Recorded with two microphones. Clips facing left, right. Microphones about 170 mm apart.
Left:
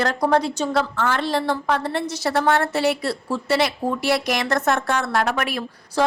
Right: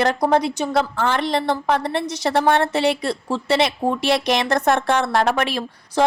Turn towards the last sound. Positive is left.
turn(degrees=-25)  # may be behind; listen again after turning